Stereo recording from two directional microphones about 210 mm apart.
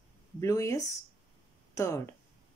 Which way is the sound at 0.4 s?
15° left (ahead or behind).